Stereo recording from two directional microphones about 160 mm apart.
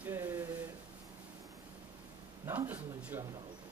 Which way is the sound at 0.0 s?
10° right (ahead or behind).